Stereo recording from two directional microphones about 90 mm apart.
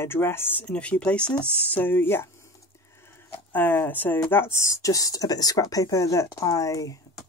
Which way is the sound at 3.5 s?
20° left (ahead or behind).